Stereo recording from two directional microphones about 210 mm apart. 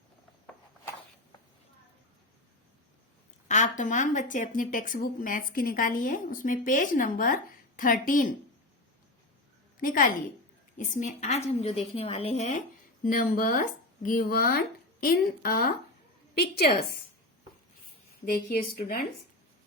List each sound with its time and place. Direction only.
3.5 s a woman's voice: 35° left (ahead or behind)
9.8 s a woman's voice: 40° left (ahead or behind)
18.3 s a woman's voice: 45° left (ahead or behind)